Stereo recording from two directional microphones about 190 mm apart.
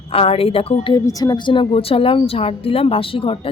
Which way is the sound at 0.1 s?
30° left (ahead or behind).